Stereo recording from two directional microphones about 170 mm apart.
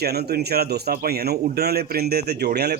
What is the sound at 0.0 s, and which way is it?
A man's voice, 70° right (ahead or behind).